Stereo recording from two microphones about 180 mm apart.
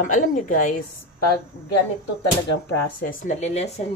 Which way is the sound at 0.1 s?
45° left (ahead or behind).